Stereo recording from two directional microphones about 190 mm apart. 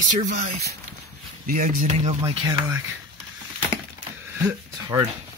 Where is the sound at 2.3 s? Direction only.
20° right (ahead or behind).